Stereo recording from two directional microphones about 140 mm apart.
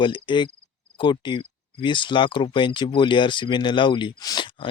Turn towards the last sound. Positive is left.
turn(degrees=35)  # may be behind; listen again after turning